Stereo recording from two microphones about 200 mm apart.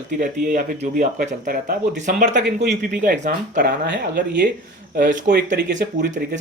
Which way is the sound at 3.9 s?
60° right (ahead or behind).